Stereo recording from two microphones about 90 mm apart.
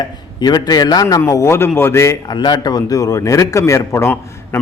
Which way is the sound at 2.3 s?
50° left (ahead or behind).